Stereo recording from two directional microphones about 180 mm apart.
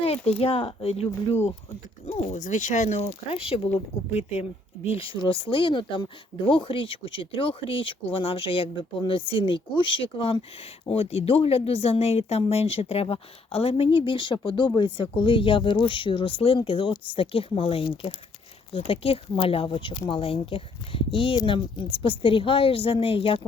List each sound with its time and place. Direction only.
0.0 s speech: 35° left (ahead or behind)